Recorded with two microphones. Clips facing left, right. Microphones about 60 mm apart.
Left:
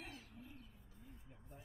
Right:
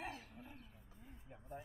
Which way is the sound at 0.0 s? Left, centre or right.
Right.